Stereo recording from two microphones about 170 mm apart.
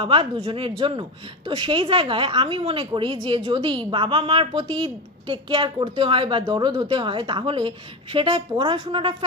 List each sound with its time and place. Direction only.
0.0 s a woman's voice: 30° right (ahead or behind)